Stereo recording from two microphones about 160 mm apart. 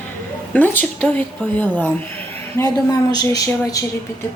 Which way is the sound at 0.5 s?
10° left (ahead or behind).